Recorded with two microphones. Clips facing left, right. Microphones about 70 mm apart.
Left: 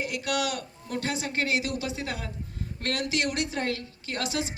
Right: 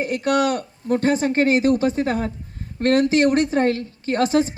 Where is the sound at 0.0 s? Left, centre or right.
Right.